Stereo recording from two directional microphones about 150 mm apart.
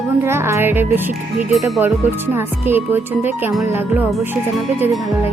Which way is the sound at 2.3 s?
15° right (ahead or behind).